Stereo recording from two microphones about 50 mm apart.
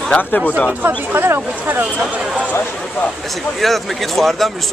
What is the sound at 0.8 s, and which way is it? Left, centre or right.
Speech, right.